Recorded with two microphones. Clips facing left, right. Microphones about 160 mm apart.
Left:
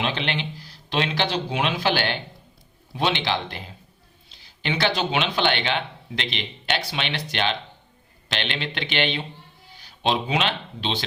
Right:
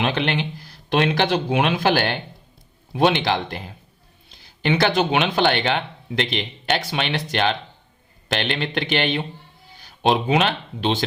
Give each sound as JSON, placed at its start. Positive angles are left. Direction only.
{"t": 0.0, "sound": "speech", "side_deg": -50}
{"t": 4.6, "sound": "speech", "side_deg": -50}